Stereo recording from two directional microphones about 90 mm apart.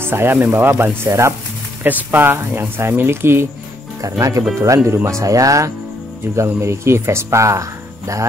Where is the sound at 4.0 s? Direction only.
40° right (ahead or behind).